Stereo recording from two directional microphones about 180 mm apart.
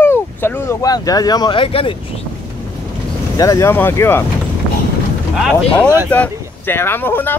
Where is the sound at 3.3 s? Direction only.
20° left (ahead or behind).